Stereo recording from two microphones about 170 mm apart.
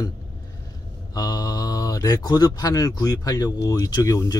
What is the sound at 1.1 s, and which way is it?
Speech, 25° left (ahead or behind).